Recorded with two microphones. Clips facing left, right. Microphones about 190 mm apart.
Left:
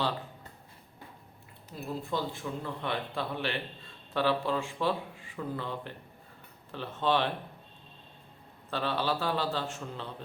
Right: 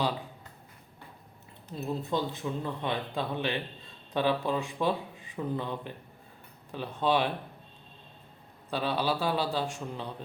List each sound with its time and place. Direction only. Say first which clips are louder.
1.7 s speech: right 3 dB; 20° right (ahead or behind)
8.7 s speech: right 1 dB; 15° right (ahead or behind)